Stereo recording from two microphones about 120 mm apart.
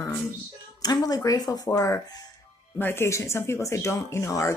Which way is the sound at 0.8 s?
30° left (ahead or behind).